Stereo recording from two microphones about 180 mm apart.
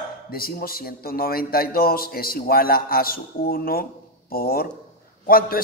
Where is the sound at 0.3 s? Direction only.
55° left (ahead or behind).